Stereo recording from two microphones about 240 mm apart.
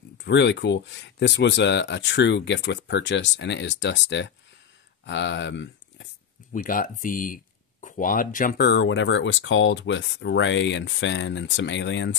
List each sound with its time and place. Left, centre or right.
0.2 s speech: left
6.5 s speech: left